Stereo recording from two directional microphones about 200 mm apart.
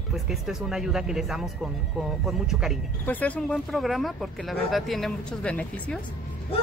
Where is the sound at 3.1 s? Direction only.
5° left (ahead or behind).